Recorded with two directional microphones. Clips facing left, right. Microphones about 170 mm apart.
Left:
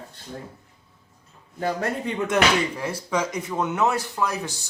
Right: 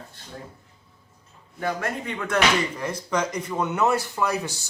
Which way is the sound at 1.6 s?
30° left (ahead or behind).